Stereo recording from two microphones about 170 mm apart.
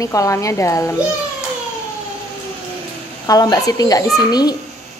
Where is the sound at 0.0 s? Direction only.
20° left (ahead or behind).